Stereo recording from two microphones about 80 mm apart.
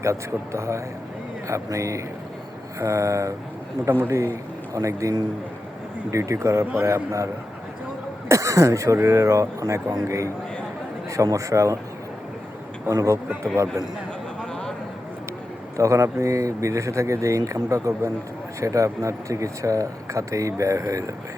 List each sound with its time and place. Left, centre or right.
0.0 s a man's voice: right
8.3 s speech: right
12.9 s speech: right
15.8 s speech: right